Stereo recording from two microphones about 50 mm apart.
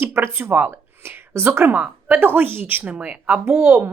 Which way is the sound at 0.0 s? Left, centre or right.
Right.